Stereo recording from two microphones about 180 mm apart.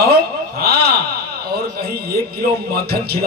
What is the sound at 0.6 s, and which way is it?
Speech, 60° right (ahead or behind).